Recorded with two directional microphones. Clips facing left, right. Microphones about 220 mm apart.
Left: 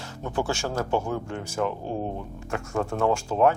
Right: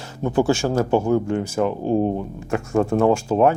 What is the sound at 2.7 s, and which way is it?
Speech, 20° right (ahead or behind).